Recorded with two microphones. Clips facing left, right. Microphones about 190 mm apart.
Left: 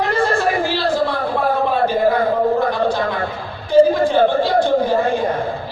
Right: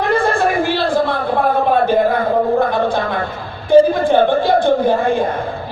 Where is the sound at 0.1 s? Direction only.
55° right (ahead or behind).